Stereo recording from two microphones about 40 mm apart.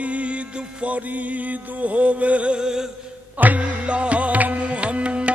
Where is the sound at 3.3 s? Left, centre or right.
Right.